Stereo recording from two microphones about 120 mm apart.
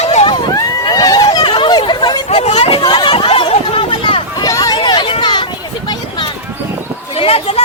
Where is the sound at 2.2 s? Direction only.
65° left (ahead or behind).